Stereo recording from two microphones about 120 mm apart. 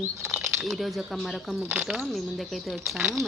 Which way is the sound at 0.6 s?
Centre (ahead or behind).